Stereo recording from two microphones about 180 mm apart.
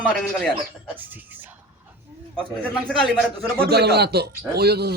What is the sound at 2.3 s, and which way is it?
Speech, 5° left (ahead or behind).